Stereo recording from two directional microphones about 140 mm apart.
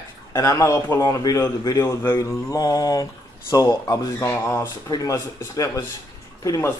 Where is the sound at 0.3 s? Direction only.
20° left (ahead or behind).